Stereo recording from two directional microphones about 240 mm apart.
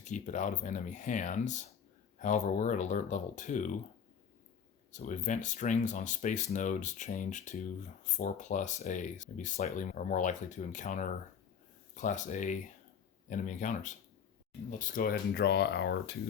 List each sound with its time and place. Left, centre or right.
0.0 s speech: left
4.9 s speech: left